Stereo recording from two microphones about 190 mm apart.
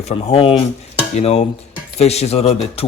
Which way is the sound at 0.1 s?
30° left (ahead or behind).